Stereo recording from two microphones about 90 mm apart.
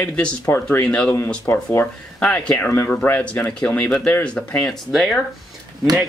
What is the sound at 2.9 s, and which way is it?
Speech, 15° left (ahead or behind).